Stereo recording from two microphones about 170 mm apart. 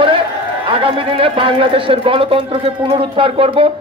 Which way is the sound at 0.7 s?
30° right (ahead or behind).